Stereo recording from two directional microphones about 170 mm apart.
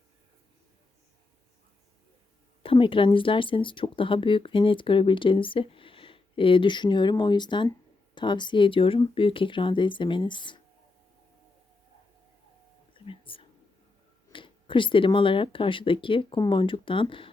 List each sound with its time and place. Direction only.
2.6 s speech: 30° left (ahead or behind)
12.9 s whispering: 30° left (ahead or behind)
14.3 s speech: 30° left (ahead or behind)